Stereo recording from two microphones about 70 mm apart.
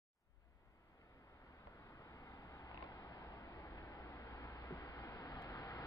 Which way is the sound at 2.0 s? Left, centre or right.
Left.